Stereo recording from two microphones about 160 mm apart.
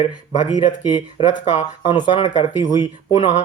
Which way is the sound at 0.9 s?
25° left (ahead or behind).